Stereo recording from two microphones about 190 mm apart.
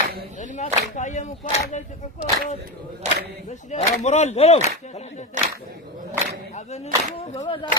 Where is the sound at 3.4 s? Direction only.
35° left (ahead or behind).